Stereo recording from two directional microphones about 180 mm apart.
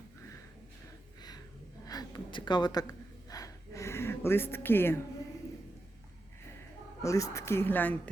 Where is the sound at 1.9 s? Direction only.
20° left (ahead or behind).